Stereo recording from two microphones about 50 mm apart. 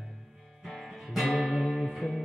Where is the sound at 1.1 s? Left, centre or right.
Centre.